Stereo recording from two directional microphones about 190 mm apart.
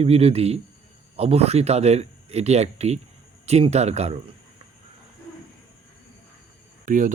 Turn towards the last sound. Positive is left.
turn(degrees=-40)  # may be behind; listen again after turning